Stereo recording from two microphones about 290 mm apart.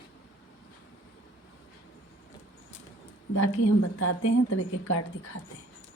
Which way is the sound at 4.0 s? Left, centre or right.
Left.